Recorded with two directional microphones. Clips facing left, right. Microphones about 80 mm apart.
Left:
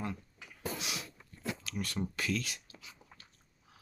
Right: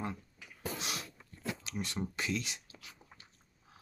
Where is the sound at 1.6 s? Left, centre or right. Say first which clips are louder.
Left 2 dB; right.